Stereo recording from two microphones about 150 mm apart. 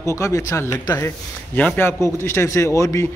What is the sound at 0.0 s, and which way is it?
A man's voice, 20° left (ahead or behind).